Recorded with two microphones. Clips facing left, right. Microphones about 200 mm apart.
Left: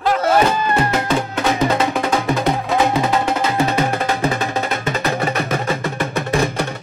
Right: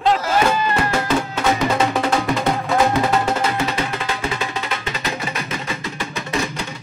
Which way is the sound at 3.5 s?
45° left (ahead or behind).